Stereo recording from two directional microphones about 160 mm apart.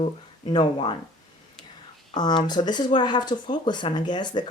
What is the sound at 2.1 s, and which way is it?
A woman's voice, 25° left (ahead or behind).